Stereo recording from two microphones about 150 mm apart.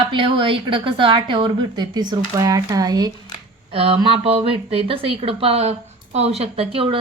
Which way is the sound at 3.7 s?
40° right (ahead or behind).